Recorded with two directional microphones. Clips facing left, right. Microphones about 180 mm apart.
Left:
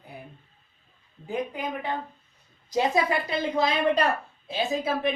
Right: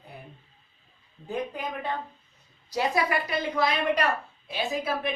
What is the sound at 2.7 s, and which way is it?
A woman's voice, 25° left (ahead or behind).